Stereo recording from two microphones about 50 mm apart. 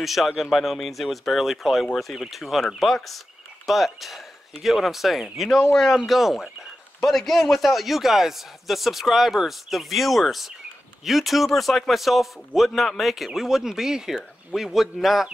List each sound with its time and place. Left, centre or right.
0.0 s a man's voice: centre